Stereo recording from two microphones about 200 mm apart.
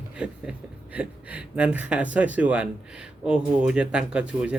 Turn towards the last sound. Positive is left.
turn(degrees=-5)  # may be behind; listen again after turning